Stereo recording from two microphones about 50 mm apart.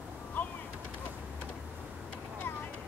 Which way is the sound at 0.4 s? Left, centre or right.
Left.